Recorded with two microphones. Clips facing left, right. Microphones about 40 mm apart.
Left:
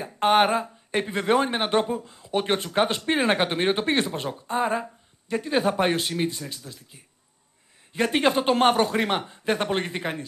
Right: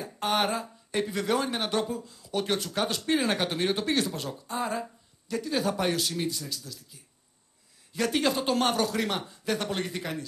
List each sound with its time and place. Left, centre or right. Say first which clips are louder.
0.0 s speech: left 8 dB; left